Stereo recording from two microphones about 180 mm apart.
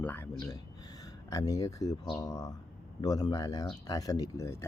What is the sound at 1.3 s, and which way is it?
Speech, 20° left (ahead or behind).